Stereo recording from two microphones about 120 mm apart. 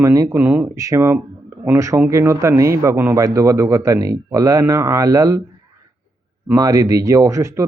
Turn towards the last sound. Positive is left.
turn(degrees=-25)  # may be behind; listen again after turning